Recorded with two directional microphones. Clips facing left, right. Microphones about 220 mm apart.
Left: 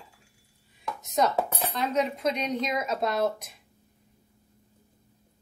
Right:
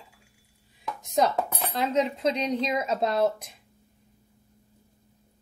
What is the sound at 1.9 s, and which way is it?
Speech, 30° right (ahead or behind).